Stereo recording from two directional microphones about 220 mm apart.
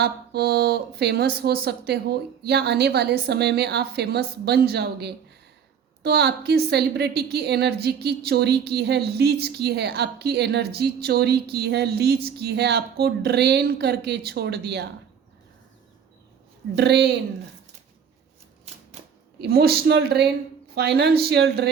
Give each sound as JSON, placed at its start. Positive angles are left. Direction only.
{"t": 0.0, "sound": "a woman's voice", "side_deg": -45}
{"t": 16.7, "sound": "a woman's voice", "side_deg": -50}
{"t": 19.4, "sound": "a woman's voice", "side_deg": -45}